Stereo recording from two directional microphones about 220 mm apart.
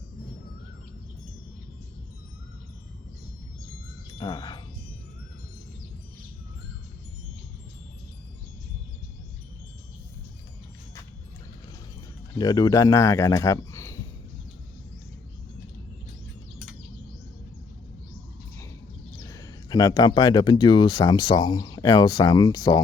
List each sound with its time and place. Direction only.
4.2 s speech: 20° left (ahead or behind)
12.4 s speech: 15° left (ahead or behind)
19.3 s speech: 15° left (ahead or behind)